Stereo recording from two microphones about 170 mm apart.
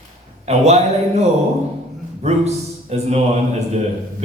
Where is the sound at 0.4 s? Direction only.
40° right (ahead or behind).